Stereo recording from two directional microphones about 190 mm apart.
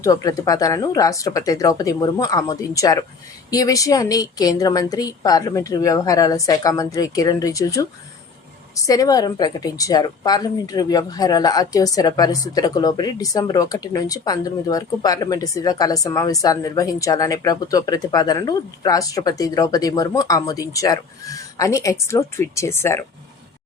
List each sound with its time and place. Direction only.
0.0 s a woman's voice: 20° left (ahead or behind)